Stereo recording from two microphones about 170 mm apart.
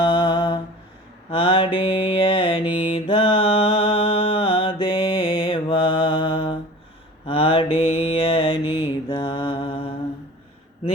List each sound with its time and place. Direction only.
0.0 s a sound: 30° left (ahead or behind)
1.3 s mantra: 30° left (ahead or behind)
8.6 s mantra: 10° right (ahead or behind)
9.0 s mantra: 25° left (ahead or behind)